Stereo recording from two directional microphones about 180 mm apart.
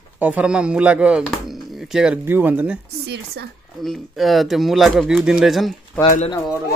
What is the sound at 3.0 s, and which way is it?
Speech, 65° right (ahead or behind).